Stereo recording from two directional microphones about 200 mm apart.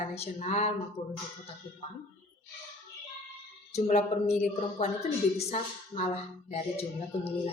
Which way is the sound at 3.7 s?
35° left (ahead or behind).